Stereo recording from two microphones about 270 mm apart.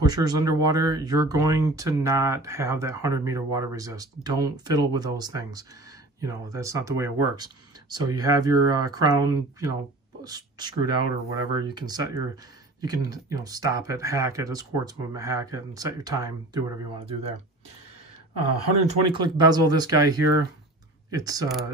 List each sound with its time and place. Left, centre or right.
0.0 s speech: centre
10.8 s speech: left
11.6 s speech: centre
18.9 s speech: centre